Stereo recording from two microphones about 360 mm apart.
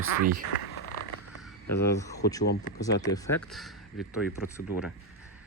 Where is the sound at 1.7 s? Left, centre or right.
Centre.